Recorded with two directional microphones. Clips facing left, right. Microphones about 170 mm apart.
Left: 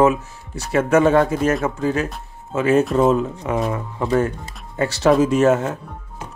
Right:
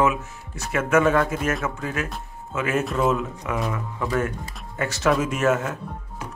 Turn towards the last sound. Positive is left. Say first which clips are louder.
# left 7 dB
turn(degrees=30)  # may be behind; listen again after turning